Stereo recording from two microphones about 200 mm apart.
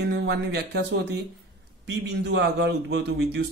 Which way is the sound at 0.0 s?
60° right (ahead or behind).